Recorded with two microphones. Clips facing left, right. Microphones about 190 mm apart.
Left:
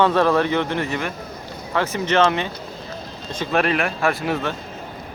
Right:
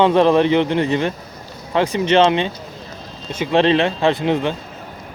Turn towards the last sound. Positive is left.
turn(degrees=-20)  # may be behind; listen again after turning